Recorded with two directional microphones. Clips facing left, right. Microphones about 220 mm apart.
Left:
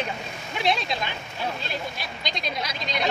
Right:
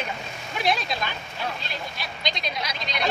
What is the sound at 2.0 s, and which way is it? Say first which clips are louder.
Speech: right 1 dB; 50° left (ahead or behind).